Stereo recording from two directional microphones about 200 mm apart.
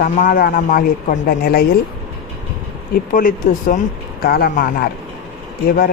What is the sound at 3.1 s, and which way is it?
Speech, 45° left (ahead or behind).